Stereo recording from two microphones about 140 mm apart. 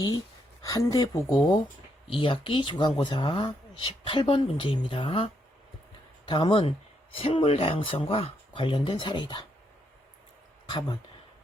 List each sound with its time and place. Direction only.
0.6 s speech: 25° left (ahead or behind)
10.7 s speech: 35° left (ahead or behind)